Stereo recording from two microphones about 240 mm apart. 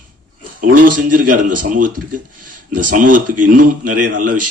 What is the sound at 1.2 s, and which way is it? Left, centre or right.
Speech, right.